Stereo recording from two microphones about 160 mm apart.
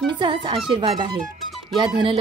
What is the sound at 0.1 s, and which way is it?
Speech, 30° right (ahead or behind).